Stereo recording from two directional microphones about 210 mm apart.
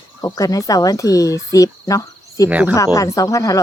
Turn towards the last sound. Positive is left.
turn(degrees=15)  # may be behind; listen again after turning